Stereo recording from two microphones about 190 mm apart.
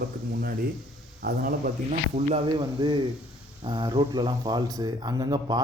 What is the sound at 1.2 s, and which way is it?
Speech, 50° right (ahead or behind).